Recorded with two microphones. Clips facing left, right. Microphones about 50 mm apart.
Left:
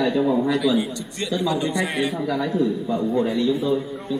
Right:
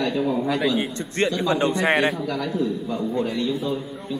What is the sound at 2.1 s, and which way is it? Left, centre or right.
A man's voice, centre.